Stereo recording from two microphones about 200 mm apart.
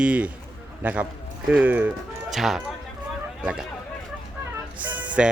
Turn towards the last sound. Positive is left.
turn(degrees=-5)  # may be behind; listen again after turning